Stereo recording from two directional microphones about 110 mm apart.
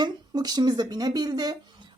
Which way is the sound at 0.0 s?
40° right (ahead or behind).